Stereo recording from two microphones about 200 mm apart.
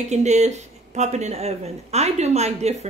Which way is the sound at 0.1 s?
35° right (ahead or behind).